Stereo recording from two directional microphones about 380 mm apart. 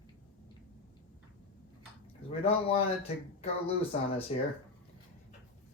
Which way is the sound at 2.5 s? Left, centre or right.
Centre.